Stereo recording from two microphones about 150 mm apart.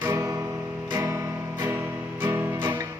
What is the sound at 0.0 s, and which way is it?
Music, 20° right (ahead or behind).